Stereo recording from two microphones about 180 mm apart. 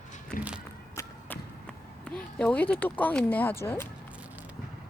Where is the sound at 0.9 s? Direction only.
10° left (ahead or behind).